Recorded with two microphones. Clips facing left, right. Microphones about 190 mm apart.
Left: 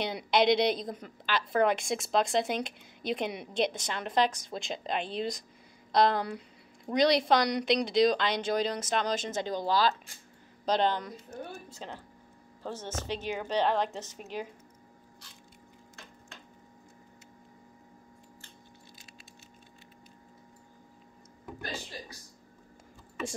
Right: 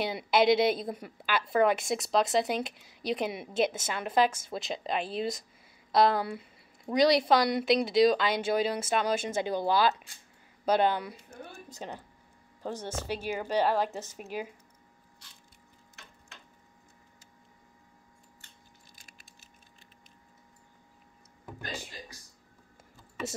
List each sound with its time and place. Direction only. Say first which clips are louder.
0.0 s a woman's voice: right 1 dB; 5° right (ahead or behind)